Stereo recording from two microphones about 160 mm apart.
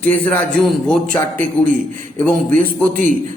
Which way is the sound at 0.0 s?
10° left (ahead or behind).